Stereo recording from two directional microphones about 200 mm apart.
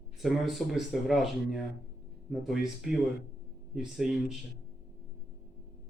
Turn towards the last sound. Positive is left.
turn(degrees=0)  # may be behind; listen again after turning